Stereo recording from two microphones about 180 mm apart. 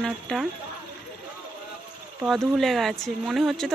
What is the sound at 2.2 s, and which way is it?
Speech, centre (ahead or behind).